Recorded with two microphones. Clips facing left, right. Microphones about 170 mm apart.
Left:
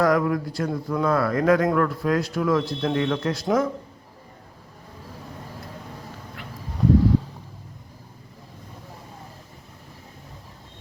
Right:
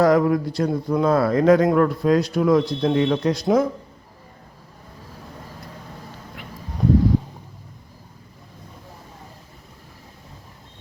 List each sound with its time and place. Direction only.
0.0 s speech: 25° right (ahead or behind)